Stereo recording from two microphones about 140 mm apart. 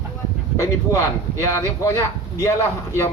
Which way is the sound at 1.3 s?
20° left (ahead or behind).